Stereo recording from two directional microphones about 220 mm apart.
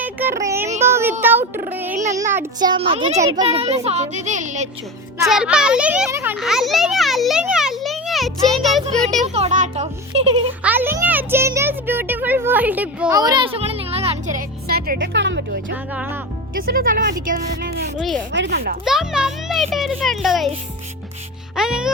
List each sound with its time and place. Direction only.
0.0 s music: 10° right (ahead or behind)
1.2 s a sound: 10° right (ahead or behind)
2.1 s a child's voice: 10° right (ahead or behind); by 4.7 s 35° right (ahead or behind)
5.3 s a child's voice: 5° right (ahead or behind)
9.2 s a child's voice: 30° right (ahead or behind)
10.6 s a child's voice: 10° right (ahead or behind); by 14.4 s 25° right (ahead or behind)
14.7 s speech: 45° right (ahead or behind)
15.7 s speech: 5° right (ahead or behind)
16.6 s speech: 40° right (ahead or behind)
18.9 s a child's voice: centre (ahead or behind)
21.5 s music: 5° right (ahead or behind)